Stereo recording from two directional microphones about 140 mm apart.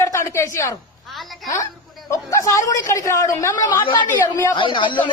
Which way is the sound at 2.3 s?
20° left (ahead or behind).